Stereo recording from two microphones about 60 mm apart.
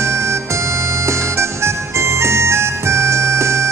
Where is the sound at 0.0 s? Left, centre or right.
Right.